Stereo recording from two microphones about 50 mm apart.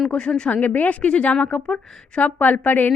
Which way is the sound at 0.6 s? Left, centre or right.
Left.